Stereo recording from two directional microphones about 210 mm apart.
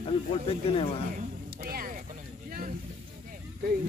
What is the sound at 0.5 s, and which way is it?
Speech, 25° left (ahead or behind).